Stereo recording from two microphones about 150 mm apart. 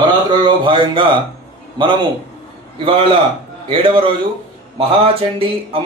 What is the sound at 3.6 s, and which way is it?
Speech, 35° right (ahead or behind).